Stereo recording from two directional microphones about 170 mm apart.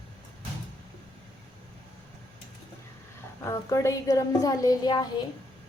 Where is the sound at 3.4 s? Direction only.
20° left (ahead or behind).